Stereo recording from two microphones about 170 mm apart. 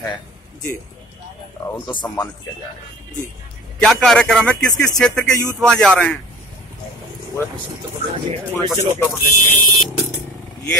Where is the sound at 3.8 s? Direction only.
5° left (ahead or behind).